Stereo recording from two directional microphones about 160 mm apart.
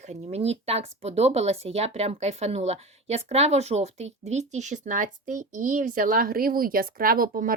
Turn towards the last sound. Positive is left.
turn(degrees=-65)  # may be behind; listen again after turning